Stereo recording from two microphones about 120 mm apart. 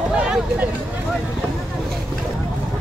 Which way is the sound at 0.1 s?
10° right (ahead or behind).